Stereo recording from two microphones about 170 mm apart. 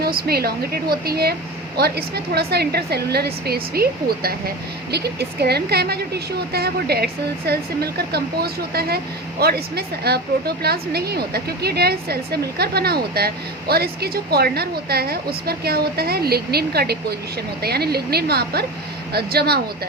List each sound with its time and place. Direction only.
0.0 s a woman's voice: 60° right (ahead or behind)